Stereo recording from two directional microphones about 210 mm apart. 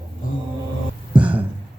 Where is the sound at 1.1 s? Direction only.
5° right (ahead or behind).